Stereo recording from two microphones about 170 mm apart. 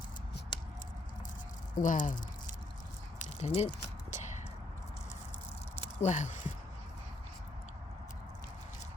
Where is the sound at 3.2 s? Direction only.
40° left (ahead or behind).